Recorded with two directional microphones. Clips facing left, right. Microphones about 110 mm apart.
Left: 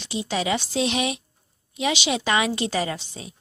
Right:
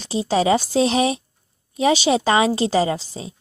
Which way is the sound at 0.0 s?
35° right (ahead or behind).